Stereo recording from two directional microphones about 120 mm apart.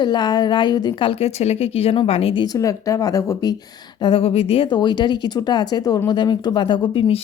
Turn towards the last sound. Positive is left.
turn(degrees=50)  # may be behind; listen again after turning